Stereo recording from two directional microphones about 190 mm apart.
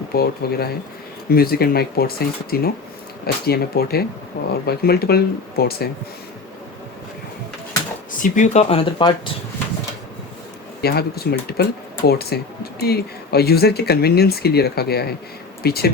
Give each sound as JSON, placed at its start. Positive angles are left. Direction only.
{"t": 0.1, "sound": "speech", "side_deg": 55}
{"t": 8.2, "sound": "speech", "side_deg": 40}
{"t": 10.8, "sound": "speech", "side_deg": 55}